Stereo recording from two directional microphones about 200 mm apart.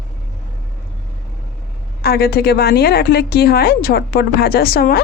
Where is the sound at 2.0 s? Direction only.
50° left (ahead or behind).